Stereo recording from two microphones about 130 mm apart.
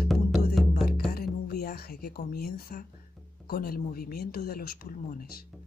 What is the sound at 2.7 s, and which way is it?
Speech, 90° left.